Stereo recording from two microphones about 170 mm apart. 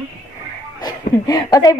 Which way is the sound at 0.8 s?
20° left (ahead or behind).